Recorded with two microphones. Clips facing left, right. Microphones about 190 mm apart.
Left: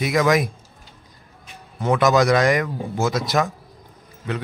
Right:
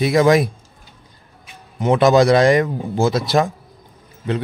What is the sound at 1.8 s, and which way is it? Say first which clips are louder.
A man's voice: right 4 dB; 25° right (ahead or behind).